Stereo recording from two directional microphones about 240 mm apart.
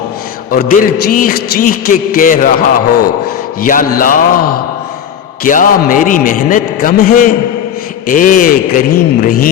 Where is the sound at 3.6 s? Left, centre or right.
Left.